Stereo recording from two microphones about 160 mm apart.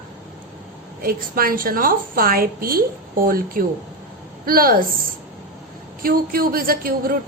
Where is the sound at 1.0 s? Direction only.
65° right (ahead or behind).